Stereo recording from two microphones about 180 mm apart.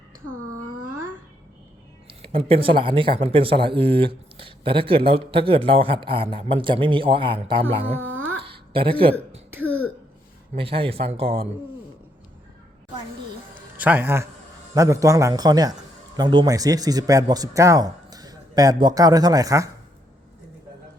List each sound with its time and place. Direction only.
2.2 s speech: 30° right (ahead or behind)
8.4 s a sound: 30° right (ahead or behind)
10.5 s speech: 30° right (ahead or behind)
13.7 s a man's voice: 10° right (ahead or behind)